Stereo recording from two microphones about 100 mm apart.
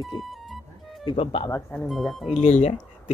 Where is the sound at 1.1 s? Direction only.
80° left.